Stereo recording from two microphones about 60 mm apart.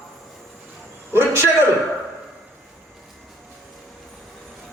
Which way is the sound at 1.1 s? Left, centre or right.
Right.